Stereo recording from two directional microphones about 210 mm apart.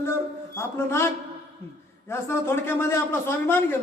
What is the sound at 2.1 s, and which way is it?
A man's voice, 10° left (ahead or behind).